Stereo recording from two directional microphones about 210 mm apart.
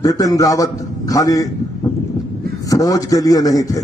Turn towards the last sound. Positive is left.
turn(degrees=15)  # may be behind; listen again after turning